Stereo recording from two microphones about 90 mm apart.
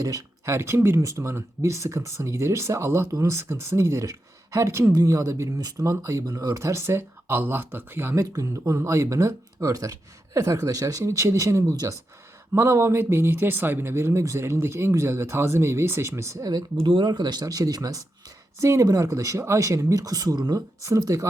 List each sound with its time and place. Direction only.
0.0 s speech: 40° right (ahead or behind)
16.7 s speech: 65° right (ahead or behind); by 21.2 s 35° right (ahead or behind)